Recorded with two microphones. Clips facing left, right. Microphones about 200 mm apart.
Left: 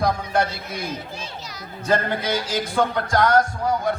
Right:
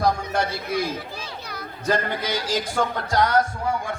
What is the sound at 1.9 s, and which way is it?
A man's voice, 55° left (ahead or behind).